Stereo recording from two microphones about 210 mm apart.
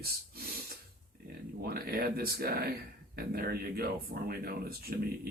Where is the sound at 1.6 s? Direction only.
45° right (ahead or behind).